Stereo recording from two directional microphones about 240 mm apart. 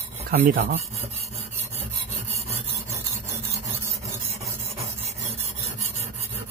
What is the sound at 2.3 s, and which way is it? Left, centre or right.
Filing, right.